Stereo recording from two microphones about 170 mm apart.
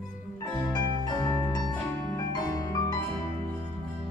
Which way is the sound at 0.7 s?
25° left (ahead or behind).